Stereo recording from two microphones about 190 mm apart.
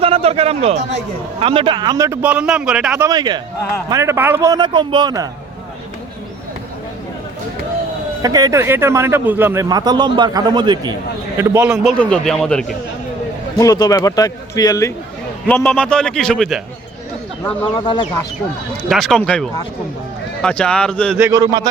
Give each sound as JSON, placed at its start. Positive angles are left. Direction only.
{"t": 0.0, "sound": "a man's voice", "side_deg": -30}
{"t": 2.2, "sound": "a man's voice", "side_deg": -5}
{"t": 3.1, "sound": "a man's voice", "side_deg": -20}
{"t": 8.2, "sound": "a man's voice", "side_deg": -20}
{"t": 11.3, "sound": "a man's voice", "side_deg": -10}
{"t": 11.9, "sound": "a man's voice", "side_deg": 5}
{"t": 13.6, "sound": "a man's voice", "side_deg": 20}
{"t": 15.4, "sound": "a man's voice", "side_deg": 5}
{"t": 17.4, "sound": "a man's voice", "side_deg": 25}
{"t": 18.9, "sound": "a man's voice", "side_deg": 0}
{"t": 21.2, "sound": "a man's voice", "side_deg": -15}